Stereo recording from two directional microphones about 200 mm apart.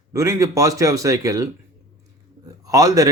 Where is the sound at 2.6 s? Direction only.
15° right (ahead or behind).